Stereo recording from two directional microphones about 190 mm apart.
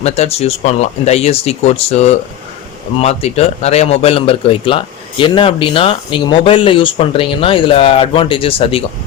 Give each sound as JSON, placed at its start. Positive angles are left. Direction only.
{"t": 0.0, "sound": "a man's voice", "side_deg": 35}